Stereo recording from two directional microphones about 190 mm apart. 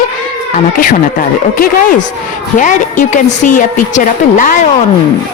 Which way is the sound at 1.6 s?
45° left (ahead or behind).